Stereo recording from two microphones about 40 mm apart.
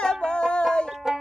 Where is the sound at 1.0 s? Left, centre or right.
Centre.